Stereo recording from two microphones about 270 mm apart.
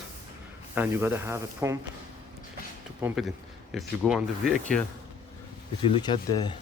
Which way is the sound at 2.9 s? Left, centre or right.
Centre.